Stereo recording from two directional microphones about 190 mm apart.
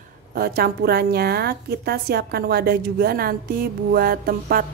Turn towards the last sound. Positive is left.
turn(degrees=-50)  # may be behind; listen again after turning